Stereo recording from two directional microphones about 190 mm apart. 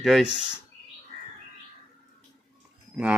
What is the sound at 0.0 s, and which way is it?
Speech, centre (ahead or behind).